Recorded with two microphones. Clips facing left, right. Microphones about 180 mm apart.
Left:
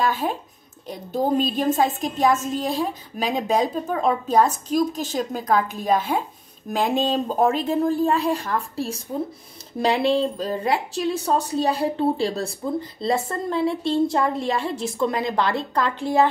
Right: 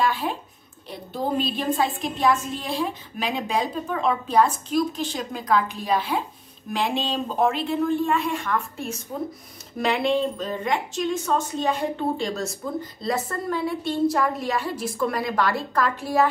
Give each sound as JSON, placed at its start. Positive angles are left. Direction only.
{"t": 0.0, "sound": "a woman's voice", "side_deg": 45}